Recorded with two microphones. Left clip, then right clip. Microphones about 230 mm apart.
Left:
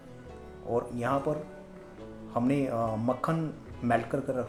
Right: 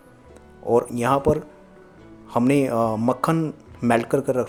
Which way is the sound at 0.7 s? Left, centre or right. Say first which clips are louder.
Right 10 dB; right.